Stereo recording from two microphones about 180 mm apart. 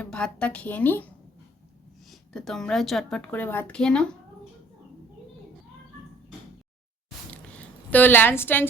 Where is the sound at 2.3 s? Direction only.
5° left (ahead or behind).